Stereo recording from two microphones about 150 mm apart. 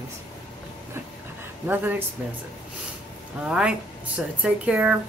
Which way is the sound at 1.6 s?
10° right (ahead or behind).